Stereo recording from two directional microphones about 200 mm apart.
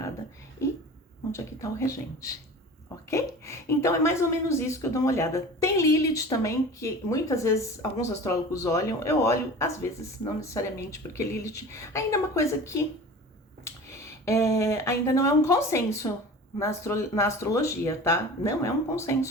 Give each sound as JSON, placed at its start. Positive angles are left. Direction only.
{"t": 1.3, "sound": "a woman's voice", "side_deg": 15}
{"t": 14.3, "sound": "a woman's voice", "side_deg": 15}